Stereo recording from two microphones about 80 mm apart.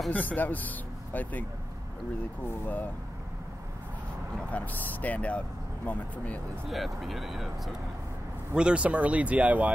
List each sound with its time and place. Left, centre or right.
0.1 s speech: left
2.4 s speech: left
4.5 s speech: centre
6.7 s speech: centre
8.5 s speech: centre